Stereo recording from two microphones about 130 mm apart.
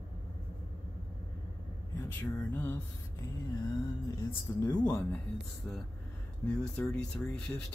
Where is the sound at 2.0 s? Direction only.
15° left (ahead or behind).